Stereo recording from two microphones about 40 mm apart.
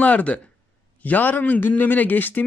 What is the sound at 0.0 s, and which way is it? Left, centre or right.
Speech, left.